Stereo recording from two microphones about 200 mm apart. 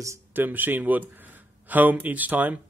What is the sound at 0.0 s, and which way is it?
Speech, 10° right (ahead or behind).